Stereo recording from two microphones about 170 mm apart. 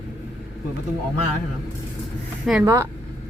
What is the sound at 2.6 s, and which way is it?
Speech, 20° right (ahead or behind).